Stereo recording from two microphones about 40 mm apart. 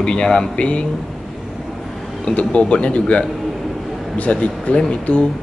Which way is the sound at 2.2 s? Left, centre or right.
Left.